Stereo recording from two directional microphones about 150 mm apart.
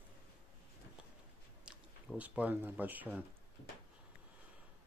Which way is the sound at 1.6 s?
10° right (ahead or behind).